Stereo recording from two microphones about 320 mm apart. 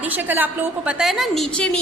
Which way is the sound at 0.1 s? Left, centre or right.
Centre.